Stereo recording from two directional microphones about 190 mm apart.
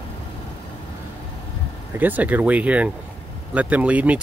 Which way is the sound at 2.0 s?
10° right (ahead or behind).